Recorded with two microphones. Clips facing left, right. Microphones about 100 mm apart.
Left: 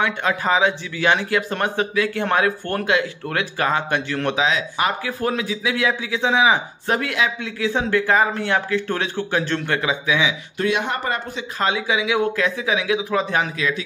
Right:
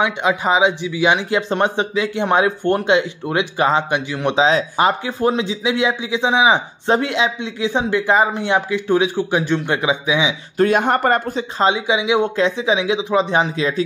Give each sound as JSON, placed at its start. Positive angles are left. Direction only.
{"t": 0.0, "sound": "a man's voice", "side_deg": -15}
{"t": 4.4, "sound": "a man's voice", "side_deg": -30}
{"t": 10.6, "sound": "speech", "side_deg": -45}
{"t": 11.5, "sound": "a man's voice", "side_deg": -25}